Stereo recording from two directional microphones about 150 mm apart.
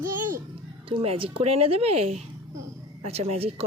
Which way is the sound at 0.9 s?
35° right (ahead or behind).